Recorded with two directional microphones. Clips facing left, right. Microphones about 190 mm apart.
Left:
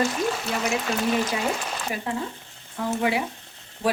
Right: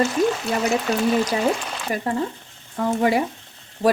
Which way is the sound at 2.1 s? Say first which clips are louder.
Right 5 dB; 45° right (ahead or behind).